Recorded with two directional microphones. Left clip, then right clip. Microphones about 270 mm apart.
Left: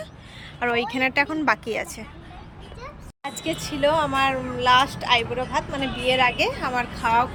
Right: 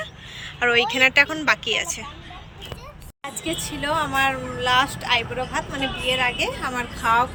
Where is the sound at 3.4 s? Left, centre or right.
Centre.